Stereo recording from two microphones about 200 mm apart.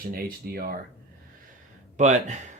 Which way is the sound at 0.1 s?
50° right (ahead or behind).